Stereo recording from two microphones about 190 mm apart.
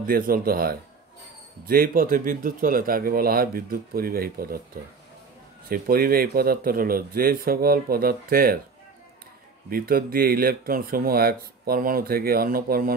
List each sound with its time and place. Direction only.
0.0 s speech: 50° right (ahead or behind)
5.7 s speech: 50° right (ahead or behind)
9.7 s speech: 50° right (ahead or behind)